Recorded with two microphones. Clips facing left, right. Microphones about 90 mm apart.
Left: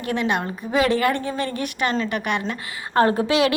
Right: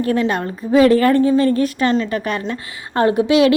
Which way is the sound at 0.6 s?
35° right (ahead or behind).